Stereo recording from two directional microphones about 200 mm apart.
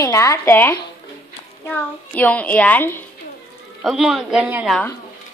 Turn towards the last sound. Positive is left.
turn(degrees=-5)  # may be behind; listen again after turning